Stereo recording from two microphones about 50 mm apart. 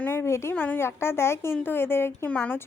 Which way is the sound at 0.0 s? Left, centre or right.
Left.